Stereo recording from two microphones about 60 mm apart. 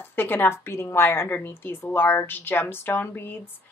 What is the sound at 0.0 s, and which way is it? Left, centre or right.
A woman's voice, left.